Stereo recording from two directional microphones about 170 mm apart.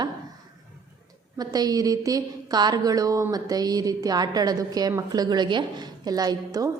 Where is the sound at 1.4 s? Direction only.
20° right (ahead or behind).